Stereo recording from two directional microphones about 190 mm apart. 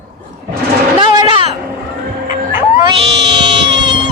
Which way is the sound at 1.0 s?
25° right (ahead or behind).